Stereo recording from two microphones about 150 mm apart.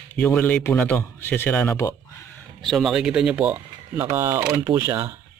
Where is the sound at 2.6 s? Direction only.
Centre (ahead or behind).